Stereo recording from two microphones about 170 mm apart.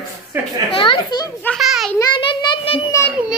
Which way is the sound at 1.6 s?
Centre (ahead or behind).